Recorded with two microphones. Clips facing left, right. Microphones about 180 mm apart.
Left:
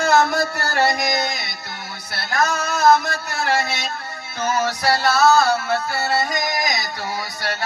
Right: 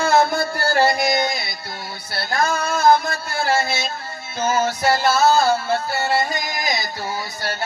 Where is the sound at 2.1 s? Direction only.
30° right (ahead or behind).